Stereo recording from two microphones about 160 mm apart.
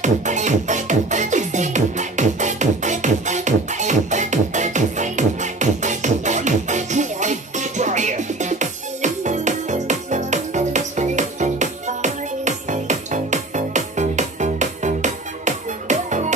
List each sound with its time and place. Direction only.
0.0 s music: 50° right (ahead or behind)